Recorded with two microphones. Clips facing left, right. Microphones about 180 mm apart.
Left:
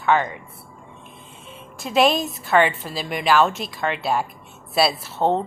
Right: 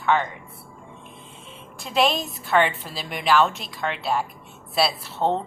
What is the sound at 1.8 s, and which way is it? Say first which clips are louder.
A woman's voice: left 4 dB; 5° left (ahead or behind).